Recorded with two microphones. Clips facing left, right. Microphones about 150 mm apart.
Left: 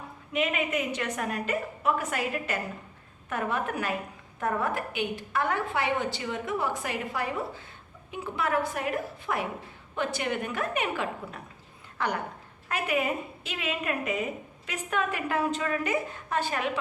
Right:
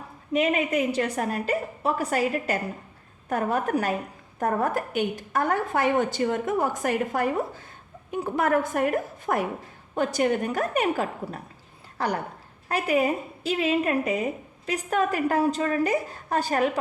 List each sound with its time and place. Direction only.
0.3 s a woman's voice: 40° right (ahead or behind)